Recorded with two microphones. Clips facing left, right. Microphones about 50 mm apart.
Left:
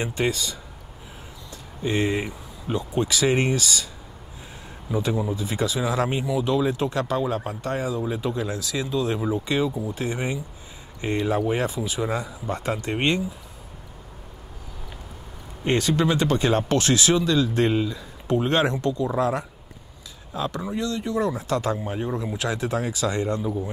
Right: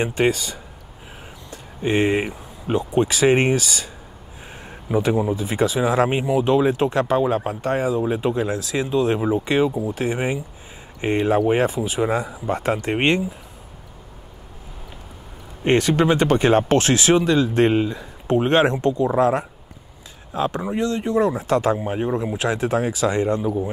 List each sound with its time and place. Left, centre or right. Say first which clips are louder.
0.0 s speech: right 5 dB; right
15.6 s speech: right 4 dB; right